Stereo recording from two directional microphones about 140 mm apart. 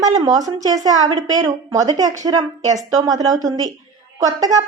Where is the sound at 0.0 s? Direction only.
25° right (ahead or behind).